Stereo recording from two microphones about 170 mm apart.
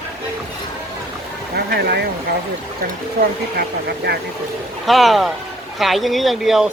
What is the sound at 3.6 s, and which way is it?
Speech, 70° right (ahead or behind).